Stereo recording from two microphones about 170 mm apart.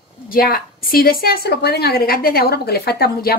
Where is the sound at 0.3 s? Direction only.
60° left (ahead or behind).